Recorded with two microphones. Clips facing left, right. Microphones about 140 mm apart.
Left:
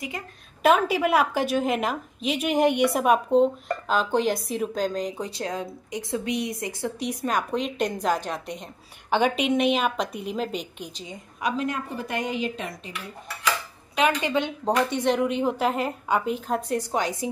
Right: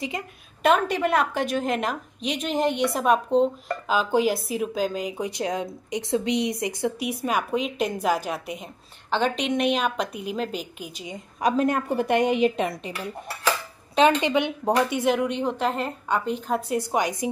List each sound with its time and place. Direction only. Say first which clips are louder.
0.6 s a woman's voice: left 1 dB; 5° left (ahead or behind)
9.1 s a woman's voice: left 2 dB; 10° left (ahead or behind)
11.4 s a woman's voice: right 5 dB; 50° right (ahead or behind); by 12.9 s 65° right (ahead or behind)
13.9 s a woman's voice: right 4 dB; 30° right (ahead or behind)
14.3 s a woman's voice: right 2 dB; 15° right (ahead or behind)